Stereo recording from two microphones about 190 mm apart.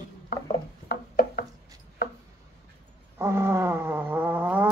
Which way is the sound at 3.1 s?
15° right (ahead or behind).